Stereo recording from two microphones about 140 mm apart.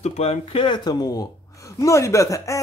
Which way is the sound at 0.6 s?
30° left (ahead or behind).